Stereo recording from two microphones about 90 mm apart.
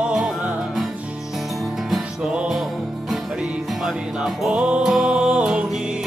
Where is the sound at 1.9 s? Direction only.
5° right (ahead or behind).